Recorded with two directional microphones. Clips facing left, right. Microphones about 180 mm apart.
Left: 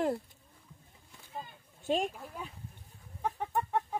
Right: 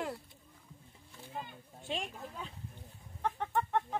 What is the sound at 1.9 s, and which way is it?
Speech, 45° left (ahead or behind).